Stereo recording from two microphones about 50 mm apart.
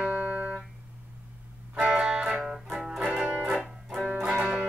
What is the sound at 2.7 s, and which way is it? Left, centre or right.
Music, centre.